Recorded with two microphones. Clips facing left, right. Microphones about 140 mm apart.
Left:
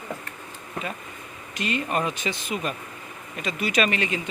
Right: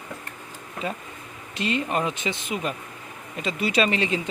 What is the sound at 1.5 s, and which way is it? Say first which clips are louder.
Speech: right 1 dB; 25° right (ahead or behind).